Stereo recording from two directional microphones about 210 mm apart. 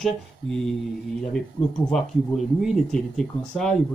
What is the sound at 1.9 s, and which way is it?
Speech, centre (ahead or behind).